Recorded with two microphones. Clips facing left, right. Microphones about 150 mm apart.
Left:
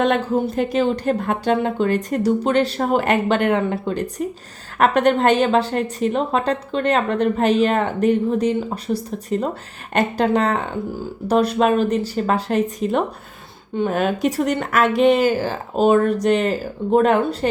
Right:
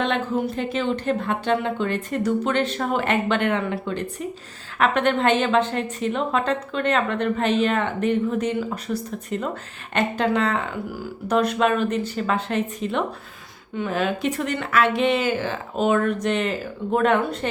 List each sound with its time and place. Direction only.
0.5 s a woman's voice: 40° left (ahead or behind)